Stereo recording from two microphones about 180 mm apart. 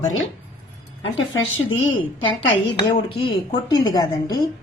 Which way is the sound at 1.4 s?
90° left.